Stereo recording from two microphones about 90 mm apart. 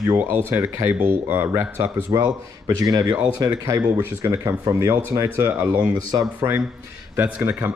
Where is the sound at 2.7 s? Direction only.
45° right (ahead or behind).